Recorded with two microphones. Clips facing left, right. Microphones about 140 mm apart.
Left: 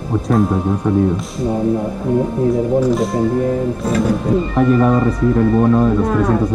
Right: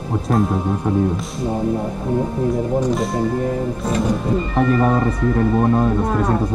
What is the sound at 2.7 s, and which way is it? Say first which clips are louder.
Speech: left 4 dB; 5° left (ahead or behind).